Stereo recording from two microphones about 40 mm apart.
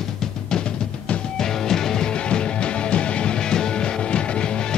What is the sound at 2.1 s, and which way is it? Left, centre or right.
Music, left.